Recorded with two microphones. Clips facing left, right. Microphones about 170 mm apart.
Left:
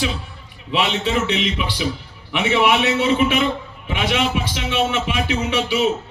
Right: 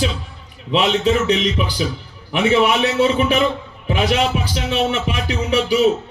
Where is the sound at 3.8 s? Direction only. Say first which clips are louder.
Right 3 dB; 40° right (ahead or behind).